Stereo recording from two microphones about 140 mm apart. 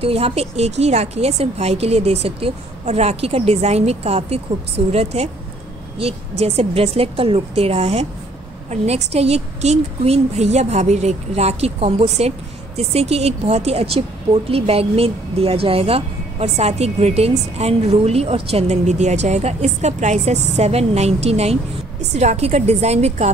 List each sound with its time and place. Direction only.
0.0 s a woman's voice: 45° right (ahead or behind)